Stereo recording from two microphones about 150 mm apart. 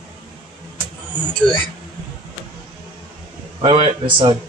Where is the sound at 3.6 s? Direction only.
30° right (ahead or behind).